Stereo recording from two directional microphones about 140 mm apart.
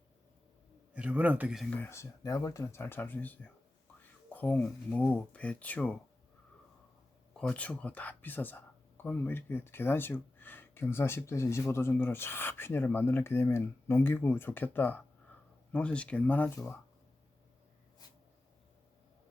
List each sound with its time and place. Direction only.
0.9 s speech: 10° right (ahead or behind)
1.7 s speech: 15° left (ahead or behind)
7.3 s speech: 10° left (ahead or behind)